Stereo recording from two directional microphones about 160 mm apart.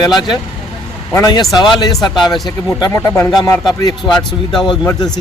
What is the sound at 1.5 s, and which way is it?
Speech, 25° left (ahead or behind).